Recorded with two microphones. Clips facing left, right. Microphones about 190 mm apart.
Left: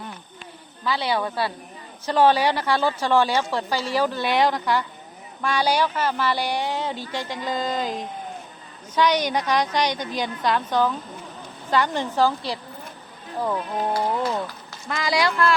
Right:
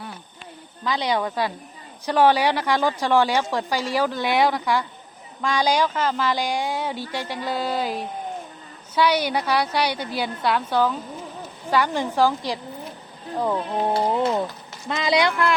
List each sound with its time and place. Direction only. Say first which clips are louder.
0.9 s a woman's voice: right 1 dB; 15° right (ahead or behind)
13.6 s speech: right 2 dB; 25° right (ahead or behind)